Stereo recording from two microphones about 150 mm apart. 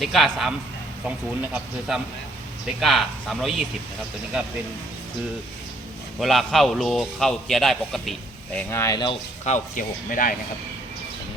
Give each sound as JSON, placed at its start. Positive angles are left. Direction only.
{"t": 0.0, "sound": "a man's voice", "side_deg": 0}
{"t": 6.1, "sound": "a man's voice", "side_deg": 0}
{"t": 8.5, "sound": "speech", "side_deg": 15}
{"t": 9.4, "sound": "speech", "side_deg": 55}